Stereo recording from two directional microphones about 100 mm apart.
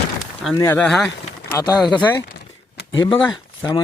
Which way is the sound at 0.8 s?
5° left (ahead or behind).